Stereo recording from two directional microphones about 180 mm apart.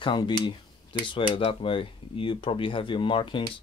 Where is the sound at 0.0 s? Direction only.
25° left (ahead or behind).